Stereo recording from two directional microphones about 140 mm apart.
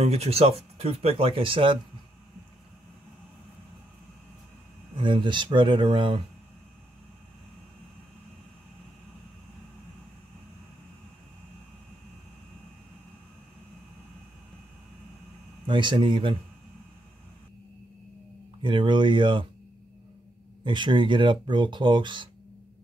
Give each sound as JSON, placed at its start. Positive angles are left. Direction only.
{"t": 0.0, "sound": "speech", "side_deg": -45}
{"t": 4.9, "sound": "speech", "side_deg": -35}
{"t": 15.6, "sound": "speech", "side_deg": -35}
{"t": 18.6, "sound": "speech", "side_deg": -35}
{"t": 20.6, "sound": "speech", "side_deg": -35}